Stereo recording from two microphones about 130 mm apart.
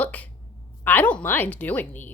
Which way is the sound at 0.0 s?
10° left (ahead or behind).